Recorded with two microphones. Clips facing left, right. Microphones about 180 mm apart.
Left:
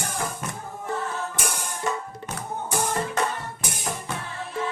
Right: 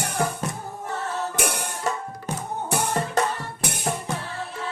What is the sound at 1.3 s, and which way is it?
Music, 65° right (ahead or behind).